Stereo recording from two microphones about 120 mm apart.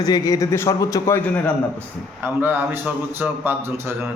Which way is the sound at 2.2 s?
15° right (ahead or behind).